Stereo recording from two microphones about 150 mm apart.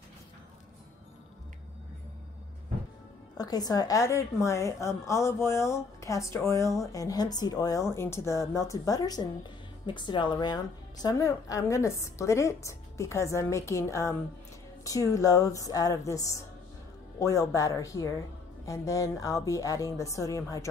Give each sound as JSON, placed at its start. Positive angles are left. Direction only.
{"t": 3.3, "sound": "a woman's voice", "side_deg": 25}